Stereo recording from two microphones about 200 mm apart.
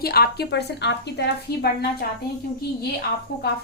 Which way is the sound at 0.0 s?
50° left (ahead or behind).